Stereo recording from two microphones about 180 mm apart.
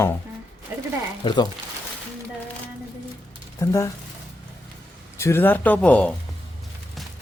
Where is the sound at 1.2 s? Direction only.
25° left (ahead or behind).